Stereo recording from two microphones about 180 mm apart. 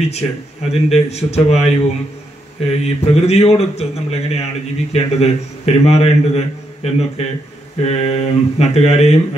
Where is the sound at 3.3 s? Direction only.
35° left (ahead or behind).